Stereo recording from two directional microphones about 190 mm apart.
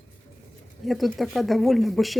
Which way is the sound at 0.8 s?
Centre (ahead or behind).